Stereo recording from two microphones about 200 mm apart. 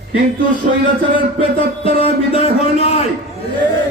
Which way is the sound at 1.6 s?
30° left (ahead or behind).